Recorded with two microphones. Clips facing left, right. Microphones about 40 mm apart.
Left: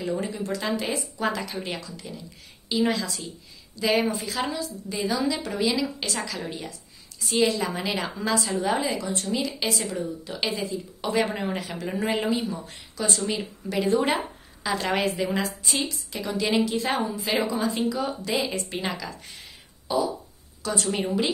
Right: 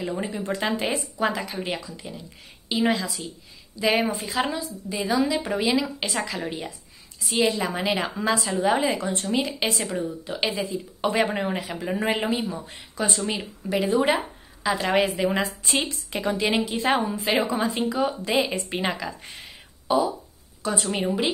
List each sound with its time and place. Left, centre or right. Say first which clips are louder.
0.0 s a woman's voice: even; right
1.3 s a woman's voice: right 2 dB; centre
4.9 s a woman's voice: right 3 dB; centre
5.2 s a woman's voice: right 2 dB; right
8.8 s a woman's voice: right 3 dB; right
11.2 s a woman's voice: right 2 dB; centre
12.9 s speech: right 1 dB; right
13.2 s a woman's voice: even; centre
15.2 s a woman's voice: right 3 dB; right
15.6 s a woman's voice: right 2 dB; right
16.4 s a woman's voice: even; right
20.8 s a woman's voice: even; centre